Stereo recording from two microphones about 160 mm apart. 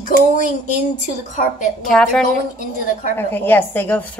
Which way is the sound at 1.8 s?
5° left (ahead or behind).